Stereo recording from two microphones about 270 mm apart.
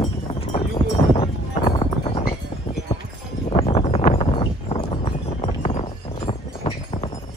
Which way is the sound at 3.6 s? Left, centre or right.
Left.